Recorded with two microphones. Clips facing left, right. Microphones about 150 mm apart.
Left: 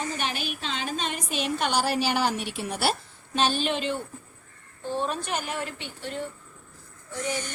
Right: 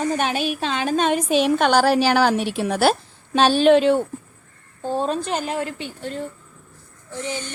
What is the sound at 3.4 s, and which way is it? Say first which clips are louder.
Speech: right 11 dB; 80° right.